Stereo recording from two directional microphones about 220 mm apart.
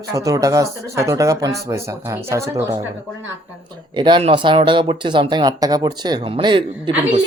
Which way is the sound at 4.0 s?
20° right (ahead or behind).